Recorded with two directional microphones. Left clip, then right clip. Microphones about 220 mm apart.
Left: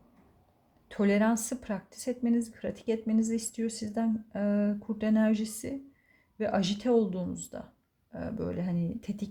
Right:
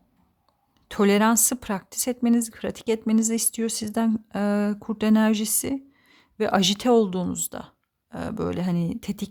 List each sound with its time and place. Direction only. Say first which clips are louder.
0.9 s speech: right 7 dB; 40° right (ahead or behind)